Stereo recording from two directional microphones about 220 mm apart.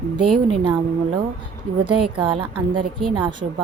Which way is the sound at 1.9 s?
90° right.